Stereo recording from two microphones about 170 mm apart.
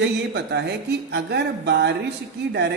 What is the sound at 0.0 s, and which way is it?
Speech, 85° right.